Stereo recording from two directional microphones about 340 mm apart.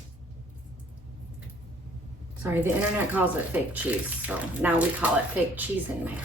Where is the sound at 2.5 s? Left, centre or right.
Centre.